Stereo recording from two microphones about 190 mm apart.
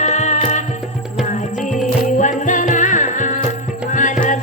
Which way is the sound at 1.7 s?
40° left (ahead or behind).